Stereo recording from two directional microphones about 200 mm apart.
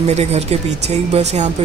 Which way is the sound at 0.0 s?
35° right (ahead or behind).